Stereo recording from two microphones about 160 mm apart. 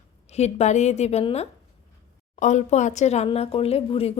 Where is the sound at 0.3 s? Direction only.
45° left (ahead or behind).